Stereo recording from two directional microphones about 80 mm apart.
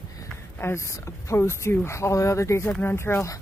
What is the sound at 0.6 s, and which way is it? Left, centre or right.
Speech, left.